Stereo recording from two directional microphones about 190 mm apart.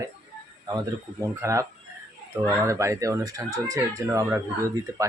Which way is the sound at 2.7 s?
15° right (ahead or behind).